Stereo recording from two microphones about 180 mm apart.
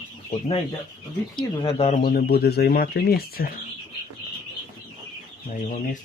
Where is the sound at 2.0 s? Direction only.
60° left (ahead or behind).